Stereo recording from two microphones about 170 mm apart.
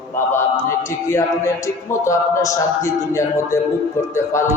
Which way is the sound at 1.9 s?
15° left (ahead or behind).